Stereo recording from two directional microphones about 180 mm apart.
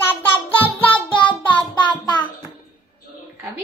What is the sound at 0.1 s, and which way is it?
Child singing, 10° left (ahead or behind).